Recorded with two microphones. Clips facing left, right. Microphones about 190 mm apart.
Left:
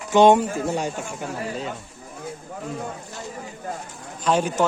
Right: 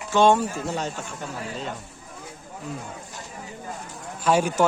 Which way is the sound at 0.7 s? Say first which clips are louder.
Left 3 dB; 10° left (ahead or behind).